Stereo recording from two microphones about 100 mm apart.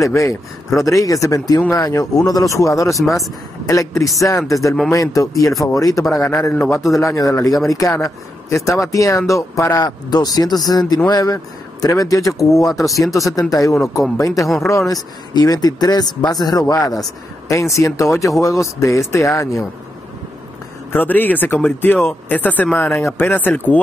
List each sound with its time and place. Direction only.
0.0 s speech: 30° left (ahead or behind)
9.8 s speech: 45° left (ahead or behind)
12.7 s speech: centre (ahead or behind)
13.4 s speech: 35° left (ahead or behind)
20.9 s speech: 20° left (ahead or behind)